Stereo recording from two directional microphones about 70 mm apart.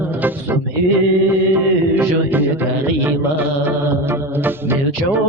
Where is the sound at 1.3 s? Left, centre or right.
Right.